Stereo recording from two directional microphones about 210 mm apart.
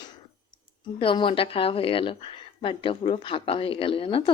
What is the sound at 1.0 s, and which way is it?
Speech, 25° left (ahead or behind).